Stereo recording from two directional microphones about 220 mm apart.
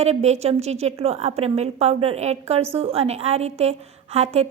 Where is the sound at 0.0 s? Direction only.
30° right (ahead or behind).